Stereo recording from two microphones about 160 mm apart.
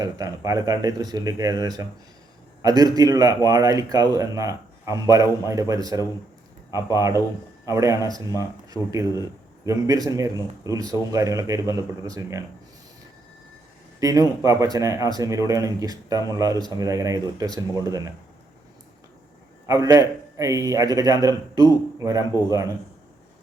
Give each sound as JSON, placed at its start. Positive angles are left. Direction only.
{"t": 0.0, "sound": "a man's voice", "side_deg": -20}
{"t": 14.0, "sound": "a man's voice", "side_deg": -20}
{"t": 19.6, "sound": "a man's voice", "side_deg": -20}